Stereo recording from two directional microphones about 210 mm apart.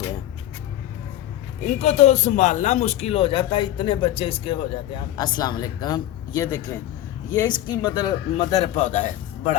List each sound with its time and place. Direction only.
1.6 s a man's voice: 35° left (ahead or behind)